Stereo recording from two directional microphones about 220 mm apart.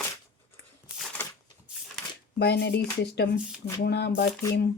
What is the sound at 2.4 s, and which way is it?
Speech, 50° left (ahead or behind).